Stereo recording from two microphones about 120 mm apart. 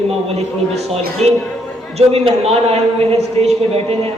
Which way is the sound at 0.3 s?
60° right (ahead or behind).